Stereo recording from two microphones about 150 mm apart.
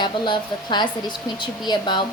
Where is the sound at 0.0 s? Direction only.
30° left (ahead or behind).